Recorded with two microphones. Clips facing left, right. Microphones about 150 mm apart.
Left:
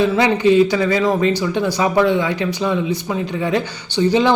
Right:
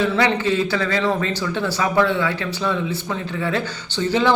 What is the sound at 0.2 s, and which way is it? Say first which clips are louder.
Speech: left 6 dB; 15° left (ahead or behind).